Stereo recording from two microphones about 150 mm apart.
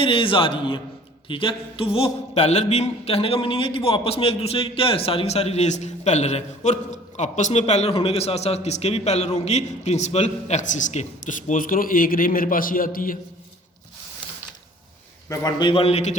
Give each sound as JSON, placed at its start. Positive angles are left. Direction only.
{"t": 0.0, "sound": "a man's voice", "side_deg": 35}
{"t": 15.3, "sound": "a man's voice", "side_deg": 25}